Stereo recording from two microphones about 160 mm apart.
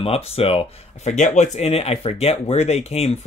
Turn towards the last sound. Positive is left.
turn(degrees=40)  # may be behind; listen again after turning